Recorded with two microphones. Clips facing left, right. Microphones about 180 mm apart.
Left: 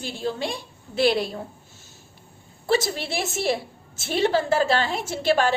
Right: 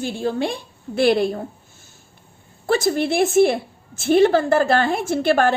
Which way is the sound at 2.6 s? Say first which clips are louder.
Right 5 dB; 50° right (ahead or behind).